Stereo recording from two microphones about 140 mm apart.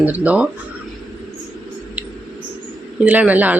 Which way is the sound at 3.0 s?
10° right (ahead or behind).